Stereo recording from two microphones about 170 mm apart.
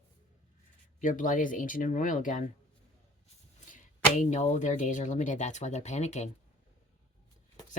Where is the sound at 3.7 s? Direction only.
45° left (ahead or behind).